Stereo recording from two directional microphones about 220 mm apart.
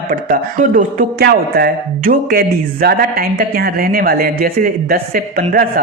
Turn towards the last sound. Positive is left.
turn(degrees=-40)  # may be behind; listen again after turning